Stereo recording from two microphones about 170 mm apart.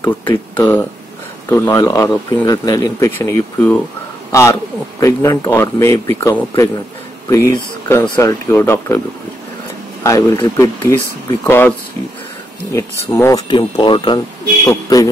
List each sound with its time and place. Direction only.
0.0 s speech: 25° left (ahead or behind)
1.5 s a man's voice: 15° left (ahead or behind)
10.0 s speech: 20° left (ahead or behind)
13.1 s speech: 20° left (ahead or behind)